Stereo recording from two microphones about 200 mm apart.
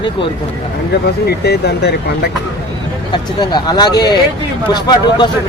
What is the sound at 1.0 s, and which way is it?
Speech, 55° left (ahead or behind).